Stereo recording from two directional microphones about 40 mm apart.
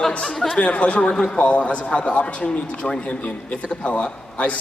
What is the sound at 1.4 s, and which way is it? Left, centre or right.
A man's voice, left.